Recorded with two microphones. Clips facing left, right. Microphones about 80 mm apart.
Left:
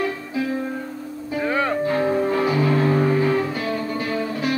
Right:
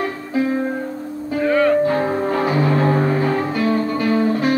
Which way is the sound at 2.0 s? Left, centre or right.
Right.